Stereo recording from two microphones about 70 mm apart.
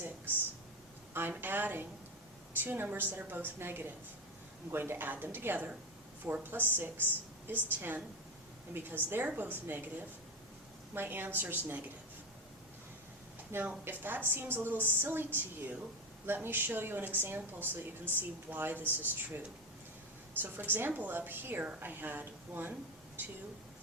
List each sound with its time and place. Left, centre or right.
1.3 s a woman's voice: right
13.5 s a woman's voice: right
20.4 s a woman's voice: right